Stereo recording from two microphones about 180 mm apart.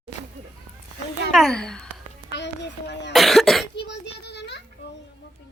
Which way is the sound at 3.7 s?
70° left (ahead or behind).